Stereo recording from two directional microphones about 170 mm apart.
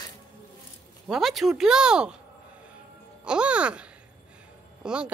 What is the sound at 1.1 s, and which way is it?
Speech, centre (ahead or behind).